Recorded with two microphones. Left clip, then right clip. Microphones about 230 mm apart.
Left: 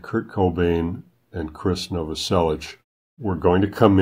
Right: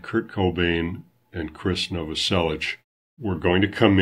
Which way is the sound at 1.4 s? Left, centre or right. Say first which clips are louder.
Left 1 dB; left.